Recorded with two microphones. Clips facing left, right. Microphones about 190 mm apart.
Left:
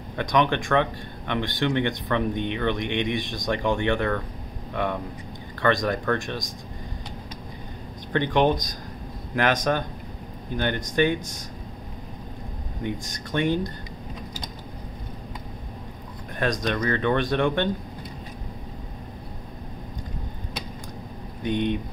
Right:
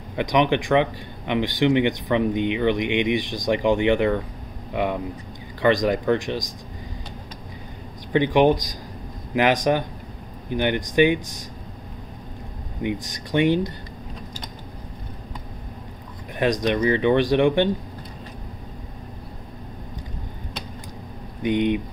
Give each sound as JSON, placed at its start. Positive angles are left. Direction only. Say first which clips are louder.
{"t": 0.1, "sound": "speech", "louder": "right 3 dB", "side_deg": -15}
{"t": 8.1, "sound": "speech", "louder": "right 4 dB", "side_deg": -15}
{"t": 12.8, "sound": "speech", "louder": "right 4 dB", "side_deg": -15}
{"t": 16.6, "sound": "speech", "louder": "right 5 dB", "side_deg": -15}
{"t": 21.4, "sound": "speech", "louder": "right 4 dB", "side_deg": -15}